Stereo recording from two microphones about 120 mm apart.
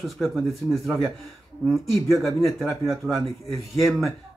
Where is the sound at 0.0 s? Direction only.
Centre (ahead or behind).